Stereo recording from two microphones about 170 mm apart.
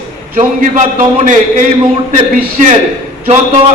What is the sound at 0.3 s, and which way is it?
A man's voice, 45° right (ahead or behind).